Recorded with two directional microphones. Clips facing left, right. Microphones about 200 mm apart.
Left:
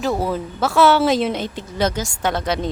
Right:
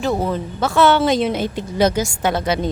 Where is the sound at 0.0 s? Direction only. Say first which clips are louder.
Right 1 dB; 5° left (ahead or behind).